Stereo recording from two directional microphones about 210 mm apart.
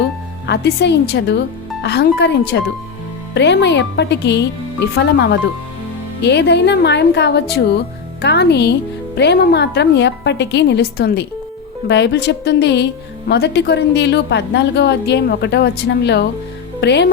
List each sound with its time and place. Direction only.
0.4 s a woman's voice: 55° left (ahead or behind)